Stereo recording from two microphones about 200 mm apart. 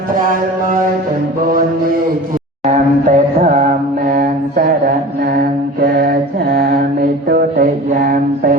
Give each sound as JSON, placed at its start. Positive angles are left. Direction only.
{"t": 0.2, "sound": "mantra", "side_deg": -45}
{"t": 2.6, "sound": "a sound", "side_deg": -35}
{"t": 4.0, "sound": "mantra", "side_deg": -45}
{"t": 5.8, "sound": "mantra", "side_deg": -50}